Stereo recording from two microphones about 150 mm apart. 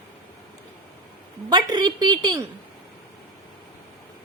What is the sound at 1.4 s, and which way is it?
Speech, 30° right (ahead or behind).